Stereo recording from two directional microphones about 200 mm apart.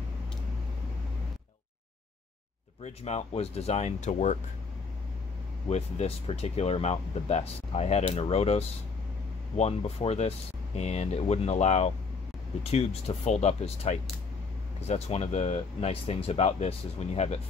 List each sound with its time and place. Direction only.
2.8 s speech: 35° left (ahead or behind)
5.7 s speech: 30° left (ahead or behind)